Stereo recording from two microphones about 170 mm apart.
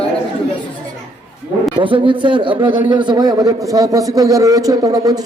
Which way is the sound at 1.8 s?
30° right (ahead or behind).